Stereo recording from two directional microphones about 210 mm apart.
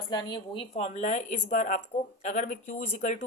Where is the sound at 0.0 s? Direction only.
20° left (ahead or behind).